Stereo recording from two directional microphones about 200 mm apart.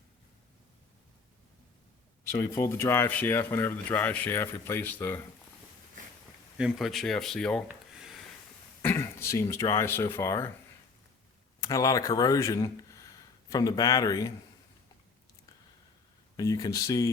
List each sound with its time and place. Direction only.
2.4 s speech: 15° left (ahead or behind)
6.6 s speech: centre (ahead or behind)
8.8 s speech: 10° left (ahead or behind)
11.6 s speech: 15° left (ahead or behind)
16.4 s speech: 20° left (ahead or behind)